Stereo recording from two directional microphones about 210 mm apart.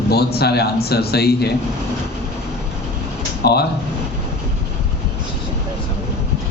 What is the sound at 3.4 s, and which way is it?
Speech, 50° left (ahead or behind).